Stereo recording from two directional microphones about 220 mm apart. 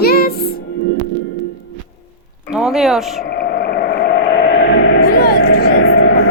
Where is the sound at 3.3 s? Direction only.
45° left (ahead or behind).